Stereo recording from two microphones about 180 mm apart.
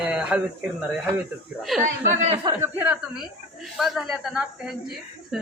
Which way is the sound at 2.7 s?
10° right (ahead or behind).